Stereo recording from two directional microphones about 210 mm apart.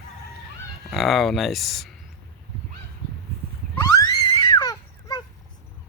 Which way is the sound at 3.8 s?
15° left (ahead or behind).